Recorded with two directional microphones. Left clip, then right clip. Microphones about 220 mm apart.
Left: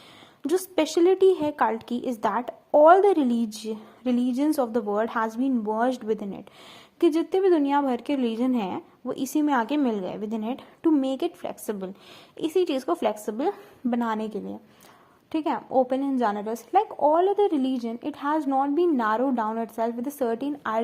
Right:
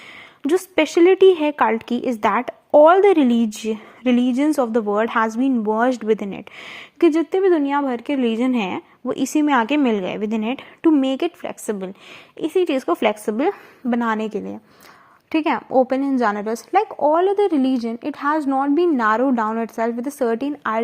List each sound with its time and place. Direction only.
0.4 s a woman's voice: 25° right (ahead or behind)